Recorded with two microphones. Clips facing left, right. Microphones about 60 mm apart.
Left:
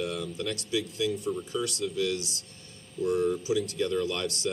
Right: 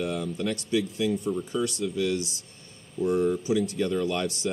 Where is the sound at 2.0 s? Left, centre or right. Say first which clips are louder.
Right 3 dB; right.